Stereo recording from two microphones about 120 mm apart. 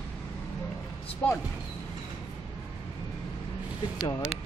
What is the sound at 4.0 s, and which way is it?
Speech, 30° left (ahead or behind).